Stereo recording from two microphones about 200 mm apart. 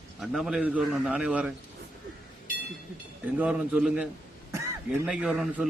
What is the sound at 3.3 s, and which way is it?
A man's voice, 5° right (ahead or behind).